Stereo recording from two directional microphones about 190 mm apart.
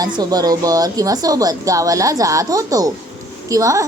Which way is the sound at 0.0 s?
20° right (ahead or behind).